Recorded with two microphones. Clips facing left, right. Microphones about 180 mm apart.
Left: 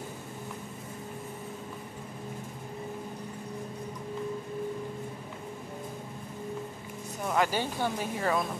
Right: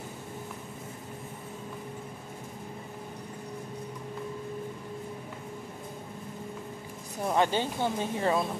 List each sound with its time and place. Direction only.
7.2 s speech: 25° right (ahead or behind)